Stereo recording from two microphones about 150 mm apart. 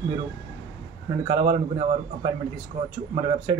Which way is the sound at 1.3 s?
30° right (ahead or behind).